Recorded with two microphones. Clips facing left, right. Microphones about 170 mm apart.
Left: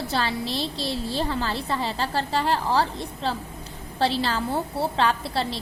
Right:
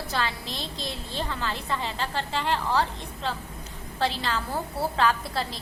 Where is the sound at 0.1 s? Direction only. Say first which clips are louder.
Left 3 dB; 30° left (ahead or behind).